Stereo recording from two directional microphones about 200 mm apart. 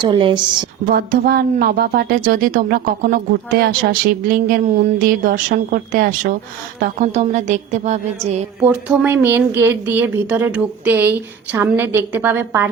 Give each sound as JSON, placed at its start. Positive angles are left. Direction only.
{"t": 0.0, "sound": "a woman's voice", "side_deg": -25}
{"t": 0.9, "sound": "speech", "side_deg": -50}
{"t": 8.6, "sound": "a woman's voice", "side_deg": -5}